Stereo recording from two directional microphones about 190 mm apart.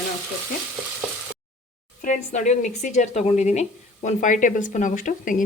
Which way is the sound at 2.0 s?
40° left (ahead or behind).